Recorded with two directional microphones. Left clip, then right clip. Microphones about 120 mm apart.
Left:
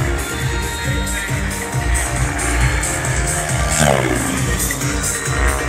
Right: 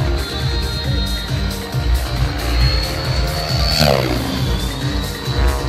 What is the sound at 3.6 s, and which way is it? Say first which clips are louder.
Music: even; 15° right (ahead or behind).